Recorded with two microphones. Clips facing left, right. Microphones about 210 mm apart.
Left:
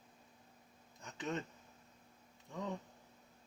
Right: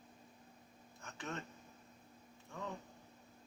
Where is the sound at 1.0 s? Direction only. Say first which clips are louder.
Left 5 dB; 20° left (ahead or behind).